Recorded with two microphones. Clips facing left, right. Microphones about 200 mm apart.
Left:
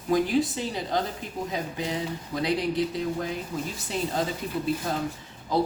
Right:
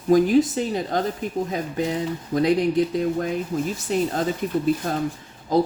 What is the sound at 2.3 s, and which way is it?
Speech, 45° right (ahead or behind).